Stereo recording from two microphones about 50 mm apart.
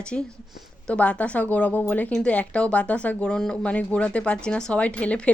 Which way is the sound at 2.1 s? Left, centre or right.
Left.